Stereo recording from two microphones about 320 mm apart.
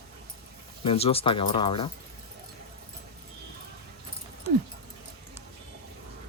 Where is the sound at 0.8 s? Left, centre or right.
Centre.